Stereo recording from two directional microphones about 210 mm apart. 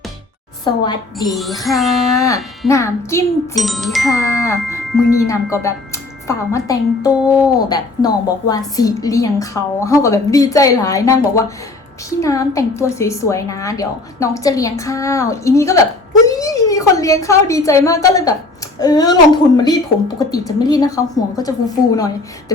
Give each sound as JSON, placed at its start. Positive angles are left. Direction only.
{"t": 1.2, "sound": "wind chime", "side_deg": 0}
{"t": 2.2, "sound": "a woman's voice", "side_deg": 15}
{"t": 3.5, "sound": "wind chime", "side_deg": 0}
{"t": 4.1, "sound": "a woman's voice", "side_deg": 15}